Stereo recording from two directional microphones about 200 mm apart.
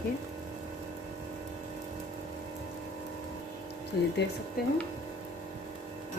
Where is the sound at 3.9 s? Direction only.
55° left (ahead or behind).